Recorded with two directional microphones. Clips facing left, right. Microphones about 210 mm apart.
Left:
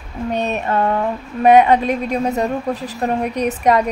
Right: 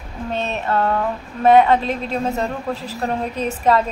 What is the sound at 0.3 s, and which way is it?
A woman's voice, 15° left (ahead or behind).